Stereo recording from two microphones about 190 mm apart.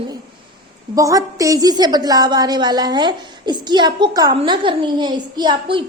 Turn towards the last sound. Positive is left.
turn(degrees=-25)  # may be behind; listen again after turning